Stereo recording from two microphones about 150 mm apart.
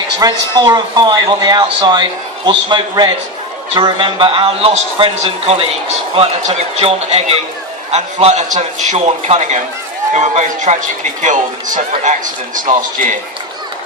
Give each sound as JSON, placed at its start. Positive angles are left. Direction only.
{"t": 0.2, "sound": "a man's voice", "side_deg": -25}